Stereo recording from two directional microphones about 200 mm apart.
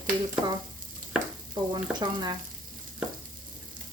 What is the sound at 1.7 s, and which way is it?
Speech, 20° right (ahead or behind).